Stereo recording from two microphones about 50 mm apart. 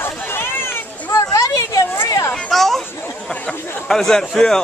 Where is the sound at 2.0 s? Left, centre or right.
Left.